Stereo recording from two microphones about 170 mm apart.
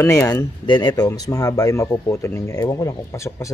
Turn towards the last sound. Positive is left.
turn(degrees=20)  # may be behind; listen again after turning